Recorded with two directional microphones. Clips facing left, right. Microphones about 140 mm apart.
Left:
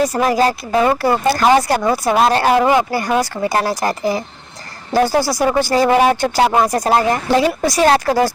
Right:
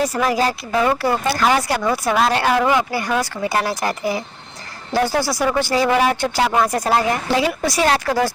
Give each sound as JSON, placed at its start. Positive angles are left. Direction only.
{"t": 0.0, "sound": "speech", "side_deg": 40}